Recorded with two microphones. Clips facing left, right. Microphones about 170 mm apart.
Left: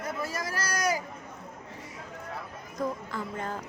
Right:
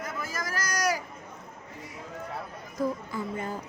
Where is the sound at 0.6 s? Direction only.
25° left (ahead or behind).